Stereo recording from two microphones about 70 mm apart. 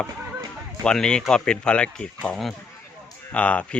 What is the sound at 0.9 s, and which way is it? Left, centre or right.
Speech, centre.